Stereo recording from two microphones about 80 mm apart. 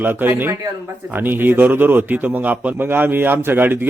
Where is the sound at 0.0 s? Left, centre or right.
Right.